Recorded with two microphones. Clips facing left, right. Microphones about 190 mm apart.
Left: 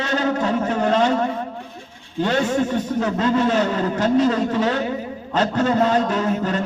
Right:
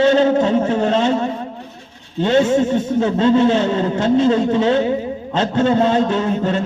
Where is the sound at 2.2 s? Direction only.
25° right (ahead or behind).